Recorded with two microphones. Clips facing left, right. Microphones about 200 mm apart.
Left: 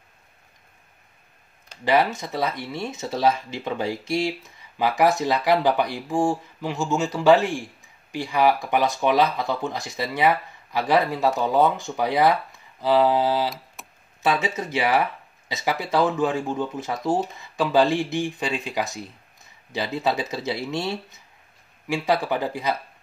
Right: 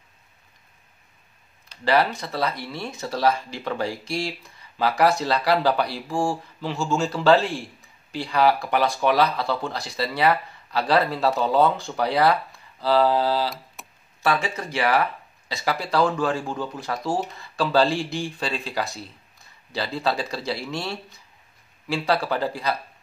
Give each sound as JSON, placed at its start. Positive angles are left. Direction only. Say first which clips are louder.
{"t": 1.9, "sound": "speech", "louder": "left 1 dB", "side_deg": 20}
{"t": 13.8, "sound": "tick-tock", "louder": "even", "side_deg": 0}
{"t": 14.2, "sound": "speech", "louder": "left 1 dB", "side_deg": 20}